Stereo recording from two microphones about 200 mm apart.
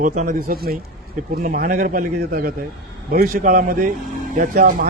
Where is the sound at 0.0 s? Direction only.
40° right (ahead or behind).